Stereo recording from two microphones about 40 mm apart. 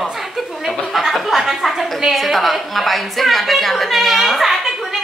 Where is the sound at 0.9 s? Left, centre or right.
Centre.